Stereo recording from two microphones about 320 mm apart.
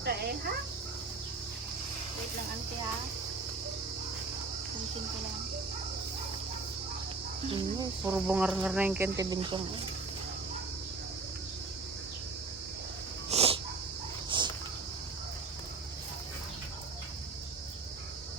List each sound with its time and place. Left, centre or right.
0.0 s dog: right
7.5 s speech: centre
13.3 s dog: centre
14.3 s cricket: centre